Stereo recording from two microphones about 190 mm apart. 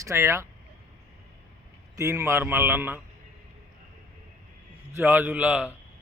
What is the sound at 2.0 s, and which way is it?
Speech, 15° right (ahead or behind).